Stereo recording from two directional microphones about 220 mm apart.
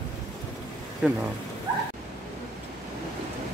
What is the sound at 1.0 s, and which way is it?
Speech, 5° right (ahead or behind).